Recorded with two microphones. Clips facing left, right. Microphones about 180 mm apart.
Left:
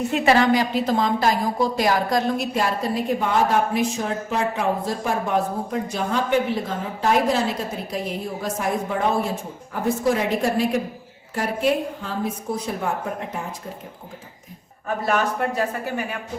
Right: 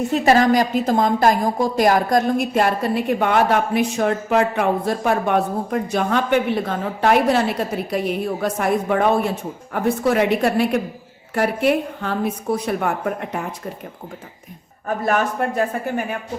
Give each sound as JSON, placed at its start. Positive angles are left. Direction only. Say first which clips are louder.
{"t": 0.1, "sound": "a woman's voice", "louder": "right 3 dB", "side_deg": -40}
{"t": 15.0, "sound": "speech", "louder": "right 2 dB", "side_deg": -50}